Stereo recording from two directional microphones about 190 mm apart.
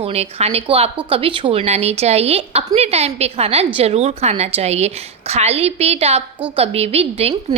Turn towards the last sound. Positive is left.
turn(degrees=-30)  # may be behind; listen again after turning